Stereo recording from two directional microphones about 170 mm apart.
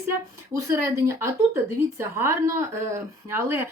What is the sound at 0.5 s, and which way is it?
Speech, 15° right (ahead or behind).